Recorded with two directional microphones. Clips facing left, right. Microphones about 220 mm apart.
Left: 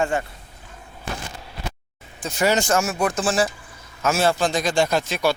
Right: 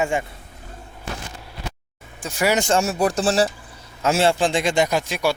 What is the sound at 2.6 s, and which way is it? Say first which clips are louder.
A man's voice: right 2 dB; 30° right (ahead or behind).